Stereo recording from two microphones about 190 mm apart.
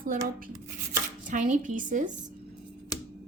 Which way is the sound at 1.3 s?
45° right (ahead or behind).